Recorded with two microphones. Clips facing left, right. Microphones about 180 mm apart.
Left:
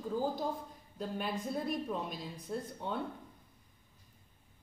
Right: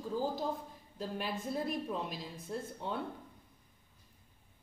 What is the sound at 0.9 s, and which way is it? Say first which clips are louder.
A woman's voice: left 1 dB; centre (ahead or behind).